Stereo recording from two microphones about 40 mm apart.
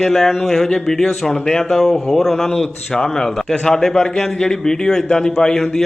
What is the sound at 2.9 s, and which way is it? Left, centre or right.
A man's voice, centre.